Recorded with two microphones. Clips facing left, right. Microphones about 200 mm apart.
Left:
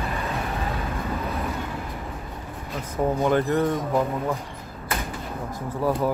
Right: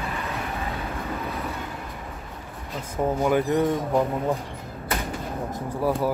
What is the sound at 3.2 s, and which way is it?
Speech, 10° right (ahead or behind).